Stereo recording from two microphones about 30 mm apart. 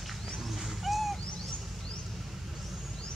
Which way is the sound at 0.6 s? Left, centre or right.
Centre.